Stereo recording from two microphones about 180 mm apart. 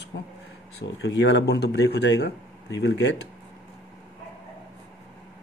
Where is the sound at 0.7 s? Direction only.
70° left (ahead or behind).